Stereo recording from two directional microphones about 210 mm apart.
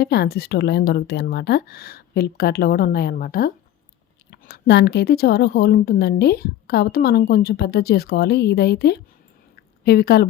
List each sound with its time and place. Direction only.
0.0 s a woman's voice: 50° left (ahead or behind)